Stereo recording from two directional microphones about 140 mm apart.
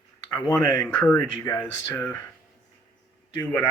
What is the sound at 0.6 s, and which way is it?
Speech, 30° left (ahead or behind).